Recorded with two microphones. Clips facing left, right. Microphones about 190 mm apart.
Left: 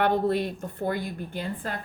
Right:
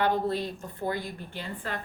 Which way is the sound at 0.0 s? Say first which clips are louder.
Left 3 dB; 60° left (ahead or behind).